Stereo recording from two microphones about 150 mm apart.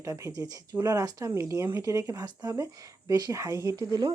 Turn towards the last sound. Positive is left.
turn(degrees=-25)  # may be behind; listen again after turning